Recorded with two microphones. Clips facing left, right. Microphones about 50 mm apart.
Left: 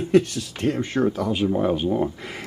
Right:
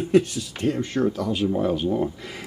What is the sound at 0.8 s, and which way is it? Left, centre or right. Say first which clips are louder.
Speech: left 1 dB; centre.